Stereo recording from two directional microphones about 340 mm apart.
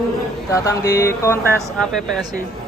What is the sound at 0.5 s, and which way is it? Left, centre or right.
Speech, centre.